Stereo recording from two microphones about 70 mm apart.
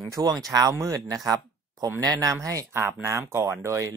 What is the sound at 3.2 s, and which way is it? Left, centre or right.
Speech, right.